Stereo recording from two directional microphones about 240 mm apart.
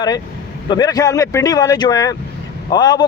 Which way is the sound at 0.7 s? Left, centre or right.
Centre.